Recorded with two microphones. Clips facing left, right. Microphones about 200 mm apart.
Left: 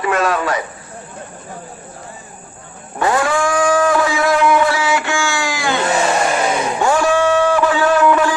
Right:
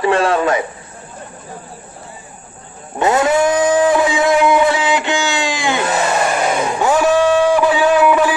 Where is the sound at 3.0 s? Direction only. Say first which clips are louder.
Right 3 dB; 25° right (ahead or behind).